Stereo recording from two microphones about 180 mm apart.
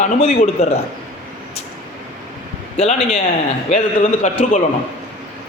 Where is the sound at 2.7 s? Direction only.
35° left (ahead or behind).